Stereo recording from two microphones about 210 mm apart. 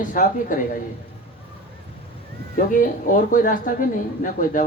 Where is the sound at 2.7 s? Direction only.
40° left (ahead or behind).